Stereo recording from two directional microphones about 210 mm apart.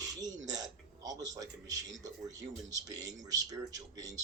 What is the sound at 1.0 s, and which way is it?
Speech, 15° right (ahead or behind).